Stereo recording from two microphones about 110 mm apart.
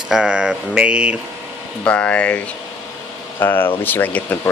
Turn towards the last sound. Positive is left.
turn(degrees=15)  # may be behind; listen again after turning